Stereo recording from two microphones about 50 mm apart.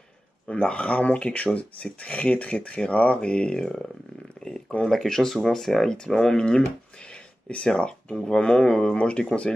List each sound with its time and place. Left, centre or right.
0.5 s speech: left
7.4 s speech: left